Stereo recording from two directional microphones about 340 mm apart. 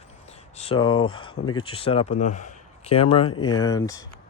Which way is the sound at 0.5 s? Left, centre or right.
Centre.